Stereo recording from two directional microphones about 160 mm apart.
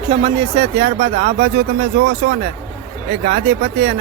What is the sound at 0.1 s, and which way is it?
Speech, 60° right (ahead or behind).